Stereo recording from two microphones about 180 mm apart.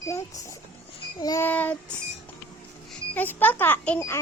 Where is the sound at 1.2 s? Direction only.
20° left (ahead or behind).